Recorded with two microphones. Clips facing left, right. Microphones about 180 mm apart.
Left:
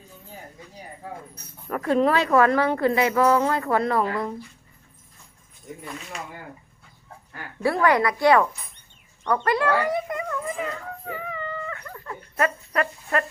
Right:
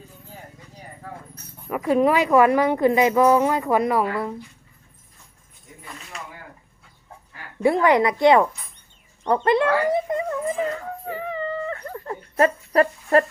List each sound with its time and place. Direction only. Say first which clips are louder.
1.7 s a woman's voice: right 2 dB; 10° right (ahead or behind)
7.6 s a woman's voice: right 3 dB; 20° right (ahead or behind)
9.2 s a sound: right 3 dB; 25° right (ahead or behind)